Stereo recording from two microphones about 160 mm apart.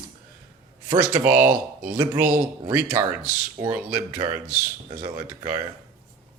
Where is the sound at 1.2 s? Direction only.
10° right (ahead or behind).